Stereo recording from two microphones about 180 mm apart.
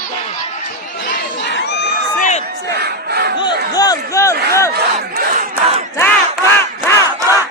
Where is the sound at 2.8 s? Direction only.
60° right (ahead or behind).